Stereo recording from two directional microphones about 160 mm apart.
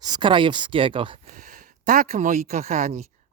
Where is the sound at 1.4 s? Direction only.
55° right (ahead or behind).